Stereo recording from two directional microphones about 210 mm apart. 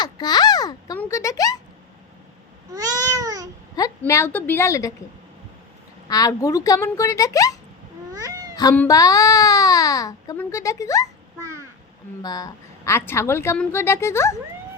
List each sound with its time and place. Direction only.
0.0 s a child's voice: 20° left (ahead or behind)
2.7 s a sound: 15° right (ahead or behind)
3.8 s speech: 15° left (ahead or behind)
6.1 s speech: 15° left (ahead or behind)
8.7 s speech: 10° left (ahead or behind)
12.2 s speech: 15° left (ahead or behind)